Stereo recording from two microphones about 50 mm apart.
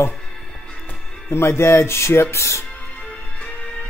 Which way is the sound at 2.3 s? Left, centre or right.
Left.